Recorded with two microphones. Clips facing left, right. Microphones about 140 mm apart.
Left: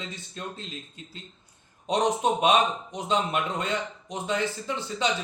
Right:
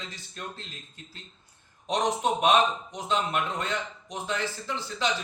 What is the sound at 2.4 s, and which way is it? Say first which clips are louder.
A man's voice: right 1 dB; 15° left (ahead or behind).